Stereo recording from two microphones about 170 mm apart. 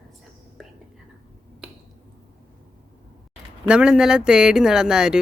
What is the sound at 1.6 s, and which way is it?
Finger snapping, 5° right (ahead or behind).